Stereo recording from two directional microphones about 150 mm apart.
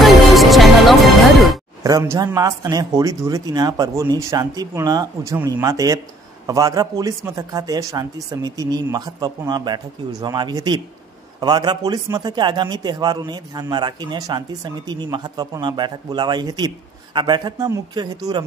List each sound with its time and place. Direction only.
0.0 s music: centre (ahead or behind)
1.8 s a man's voice: 25° right (ahead or behind)